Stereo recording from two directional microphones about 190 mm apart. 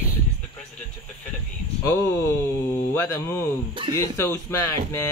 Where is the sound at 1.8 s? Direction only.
15° left (ahead or behind).